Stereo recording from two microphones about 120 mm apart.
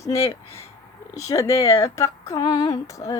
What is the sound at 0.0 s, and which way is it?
Speech, 25° left (ahead or behind).